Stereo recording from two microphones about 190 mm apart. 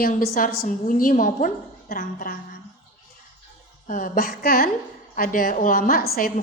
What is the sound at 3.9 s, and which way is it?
A woman's voice, 45° left (ahead or behind).